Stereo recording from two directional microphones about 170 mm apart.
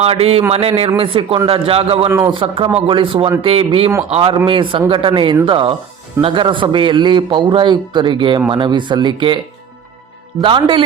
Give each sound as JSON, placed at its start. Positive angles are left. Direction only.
{"t": 0.0, "sound": "speech", "side_deg": -35}
{"t": 2.0, "sound": "a man's voice", "side_deg": -15}
{"t": 2.3, "sound": "a man's voice", "side_deg": -30}
{"t": 10.4, "sound": "a man's voice", "side_deg": -30}